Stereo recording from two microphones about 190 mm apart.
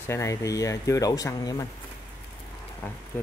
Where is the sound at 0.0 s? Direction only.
15° left (ahead or behind).